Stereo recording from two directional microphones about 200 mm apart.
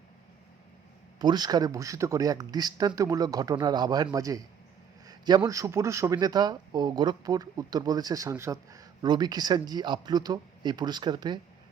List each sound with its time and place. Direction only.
1.2 s a man's voice: 20° right (ahead or behind)